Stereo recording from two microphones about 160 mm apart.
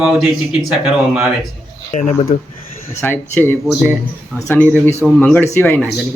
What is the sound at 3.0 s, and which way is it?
Speech, 10° left (ahead or behind).